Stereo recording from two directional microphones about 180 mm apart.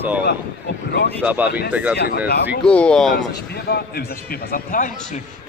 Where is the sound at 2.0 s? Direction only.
60° left (ahead or behind).